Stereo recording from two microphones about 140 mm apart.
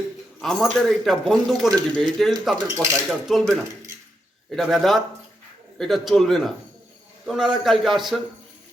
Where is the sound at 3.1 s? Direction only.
Centre (ahead or behind).